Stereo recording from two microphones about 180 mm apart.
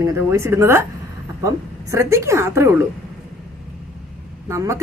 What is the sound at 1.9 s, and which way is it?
Speech, 15° right (ahead or behind).